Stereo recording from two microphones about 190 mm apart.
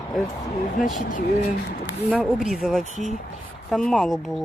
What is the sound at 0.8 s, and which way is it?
Speech, 45° left (ahead or behind).